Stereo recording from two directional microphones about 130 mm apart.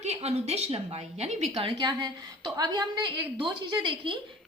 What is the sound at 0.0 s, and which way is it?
A woman's voice, 55° right (ahead or behind).